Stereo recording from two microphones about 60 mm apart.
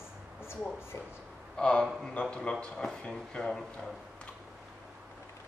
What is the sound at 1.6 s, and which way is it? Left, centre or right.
A man's voice, centre.